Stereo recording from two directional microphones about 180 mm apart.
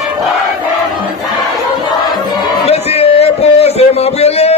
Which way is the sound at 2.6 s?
35° left (ahead or behind).